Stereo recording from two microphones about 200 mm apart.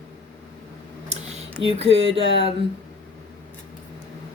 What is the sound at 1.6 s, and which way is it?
Speech, 30° right (ahead or behind).